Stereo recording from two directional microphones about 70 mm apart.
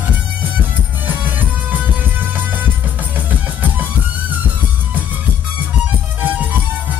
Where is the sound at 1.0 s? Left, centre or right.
Right.